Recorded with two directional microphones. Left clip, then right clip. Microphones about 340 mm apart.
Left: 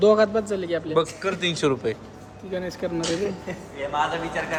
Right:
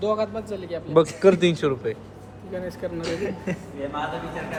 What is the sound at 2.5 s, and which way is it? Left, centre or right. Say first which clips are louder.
Speech: left 2 dB; left.